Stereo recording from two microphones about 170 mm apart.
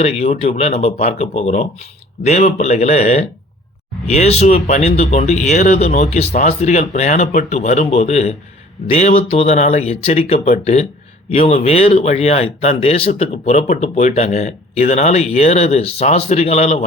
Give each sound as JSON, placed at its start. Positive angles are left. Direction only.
{"t": 0.0, "sound": "speech", "side_deg": 40}